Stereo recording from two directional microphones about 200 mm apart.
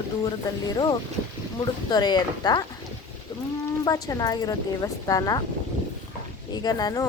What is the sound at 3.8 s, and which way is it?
Speech, 20° left (ahead or behind).